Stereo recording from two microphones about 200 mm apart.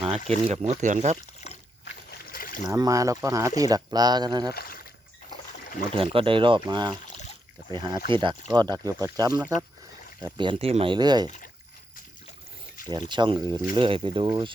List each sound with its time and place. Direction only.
0.3 s speech: 30° right (ahead or behind)
2.3 s boat: 45° left (ahead or behind)
2.6 s speech: 15° right (ahead or behind)
4.5 s a sound: 45° left (ahead or behind)
5.9 s speech: 25° right (ahead or behind)
12.9 s speech: 20° right (ahead or behind)